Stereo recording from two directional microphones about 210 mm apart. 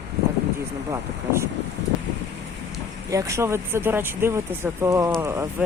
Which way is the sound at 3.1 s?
15° right (ahead or behind).